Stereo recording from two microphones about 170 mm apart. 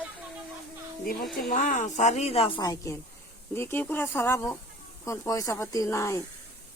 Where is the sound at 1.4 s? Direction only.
50° left (ahead or behind); by 6.2 s 15° left (ahead or behind).